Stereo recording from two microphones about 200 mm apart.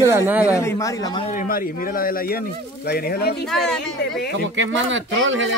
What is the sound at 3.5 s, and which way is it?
Speech, 5° left (ahead or behind).